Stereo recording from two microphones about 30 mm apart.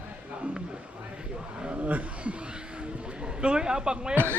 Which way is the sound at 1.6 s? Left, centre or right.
Right.